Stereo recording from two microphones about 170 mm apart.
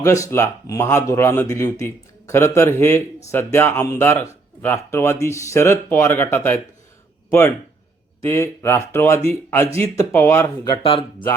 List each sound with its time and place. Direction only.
0.0 s speech: 20° left (ahead or behind)